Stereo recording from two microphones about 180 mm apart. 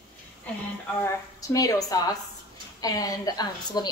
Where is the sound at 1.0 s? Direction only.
20° left (ahead or behind).